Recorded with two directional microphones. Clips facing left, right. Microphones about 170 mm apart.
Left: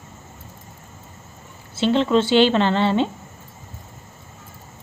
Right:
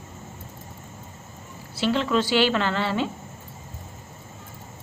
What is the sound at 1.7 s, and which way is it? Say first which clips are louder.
A woman's voice: left 5 dB; 25° left (ahead or behind).